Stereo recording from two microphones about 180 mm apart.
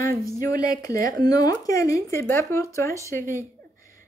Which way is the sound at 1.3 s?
20° left (ahead or behind).